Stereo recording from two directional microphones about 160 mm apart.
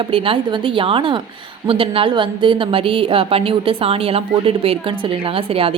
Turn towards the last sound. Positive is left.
turn(degrees=-35)  # may be behind; listen again after turning